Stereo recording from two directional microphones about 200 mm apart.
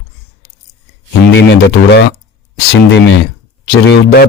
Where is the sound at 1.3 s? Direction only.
60° left (ahead or behind).